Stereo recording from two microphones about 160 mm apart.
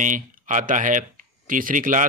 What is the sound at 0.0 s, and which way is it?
Speech, 50° right (ahead or behind).